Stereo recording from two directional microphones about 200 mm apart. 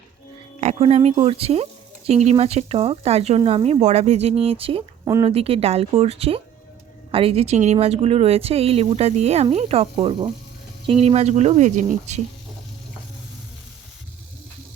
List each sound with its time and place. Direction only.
0.6 s speech: 30° right (ahead or behind)